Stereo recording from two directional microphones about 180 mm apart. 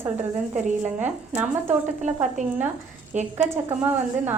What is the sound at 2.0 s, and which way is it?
A woman's voice, 40° right (ahead or behind).